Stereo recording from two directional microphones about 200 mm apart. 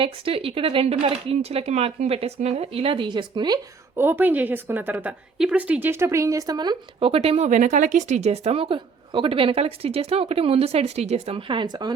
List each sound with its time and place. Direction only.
0.0 s speech: 25° right (ahead or behind)